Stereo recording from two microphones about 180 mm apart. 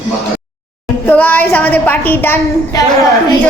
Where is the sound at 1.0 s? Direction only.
10° left (ahead or behind).